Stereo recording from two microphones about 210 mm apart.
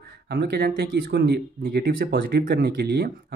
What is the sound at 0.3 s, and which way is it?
Speech, 50° right (ahead or behind).